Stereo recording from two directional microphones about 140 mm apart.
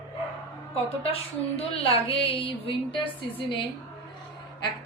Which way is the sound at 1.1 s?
45° left (ahead or behind).